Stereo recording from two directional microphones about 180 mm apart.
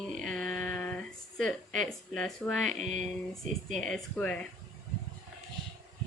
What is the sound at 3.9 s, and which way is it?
Speech, 5° left (ahead or behind).